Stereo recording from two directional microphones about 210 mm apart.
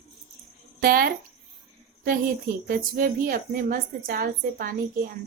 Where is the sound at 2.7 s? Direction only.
40° right (ahead or behind).